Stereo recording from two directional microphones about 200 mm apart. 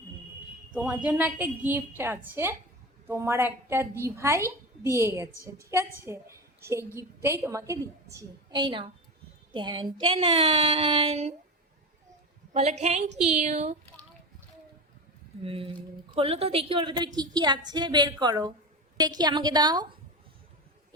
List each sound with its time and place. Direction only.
0.7 s a woman's voice: 5° right (ahead or behind); by 11.3 s 30° right (ahead or behind)
12.5 s a woman's voice: 35° right (ahead or behind)
15.4 s speech: 25° right (ahead or behind)